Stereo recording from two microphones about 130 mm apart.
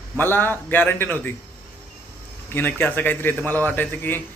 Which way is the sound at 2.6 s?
15° left (ahead or behind).